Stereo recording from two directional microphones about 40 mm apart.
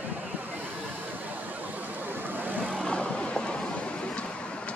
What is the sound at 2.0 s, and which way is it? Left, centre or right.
Vehicle, right.